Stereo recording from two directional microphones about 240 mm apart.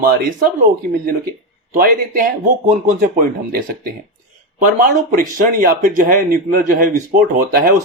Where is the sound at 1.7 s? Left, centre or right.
Right.